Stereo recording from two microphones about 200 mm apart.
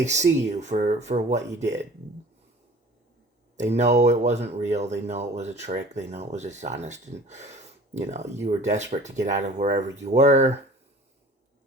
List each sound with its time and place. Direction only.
0.0 s speech: 35° right (ahead or behind)
3.6 s speech: 35° right (ahead or behind)